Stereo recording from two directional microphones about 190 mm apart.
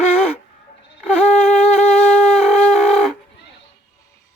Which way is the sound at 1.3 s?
5° left (ahead or behind).